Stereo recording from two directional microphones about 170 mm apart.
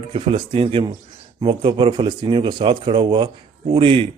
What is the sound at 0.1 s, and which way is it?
Speech, 30° right (ahead or behind).